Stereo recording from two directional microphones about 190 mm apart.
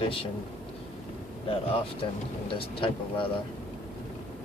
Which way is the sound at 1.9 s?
30° left (ahead or behind).